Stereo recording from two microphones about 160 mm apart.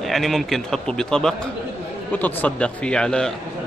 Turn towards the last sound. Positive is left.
turn(degrees=5)  # may be behind; listen again after turning